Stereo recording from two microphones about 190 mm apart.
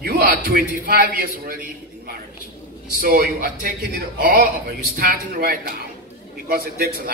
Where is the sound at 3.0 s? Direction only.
50° right (ahead or behind).